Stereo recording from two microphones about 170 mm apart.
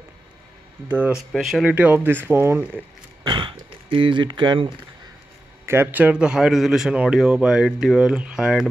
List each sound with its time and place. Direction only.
0.8 s speech: 10° right (ahead or behind)
3.3 s speech: 30° right (ahead or behind)
5.7 s a man's voice: 10° right (ahead or behind)